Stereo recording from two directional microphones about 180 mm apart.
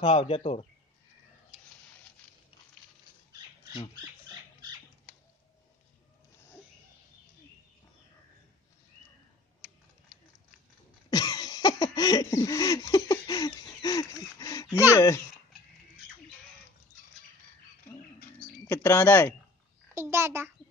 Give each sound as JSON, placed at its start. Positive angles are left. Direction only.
{"t": 0.0, "sound": "speech", "side_deg": 30}
{"t": 1.5, "sound": "a sound", "side_deg": 30}
{"t": 11.1, "sound": "a sound", "side_deg": 20}
{"t": 14.4, "sound": "speech", "side_deg": 20}
{"t": 18.7, "sound": "speech", "side_deg": 10}
{"t": 19.9, "sound": "a child's voice", "side_deg": -15}